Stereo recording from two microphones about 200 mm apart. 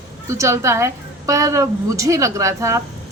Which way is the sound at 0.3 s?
15° right (ahead or behind).